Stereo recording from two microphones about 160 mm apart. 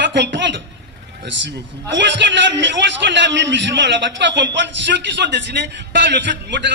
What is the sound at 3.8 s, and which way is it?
A man's voice, 90° right.